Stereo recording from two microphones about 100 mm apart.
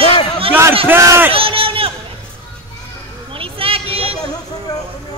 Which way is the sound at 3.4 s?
65° right (ahead or behind).